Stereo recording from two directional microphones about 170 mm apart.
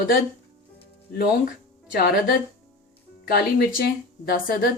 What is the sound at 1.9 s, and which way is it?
A woman's voice, 60° left (ahead or behind).